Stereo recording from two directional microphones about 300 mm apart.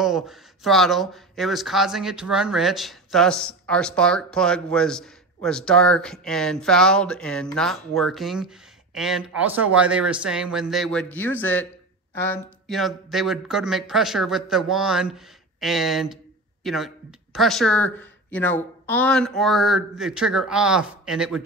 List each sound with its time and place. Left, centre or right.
0.0 s speech: centre